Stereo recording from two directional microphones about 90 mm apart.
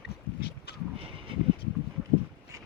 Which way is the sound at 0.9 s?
85° right.